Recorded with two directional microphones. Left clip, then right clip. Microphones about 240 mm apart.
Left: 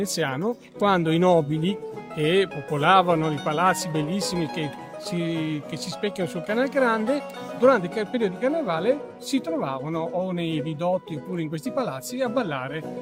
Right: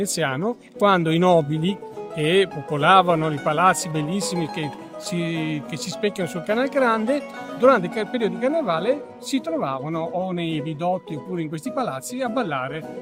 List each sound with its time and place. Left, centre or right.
0.0 s speech: centre